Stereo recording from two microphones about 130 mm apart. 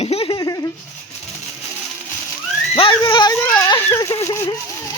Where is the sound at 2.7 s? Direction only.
45° left (ahead or behind).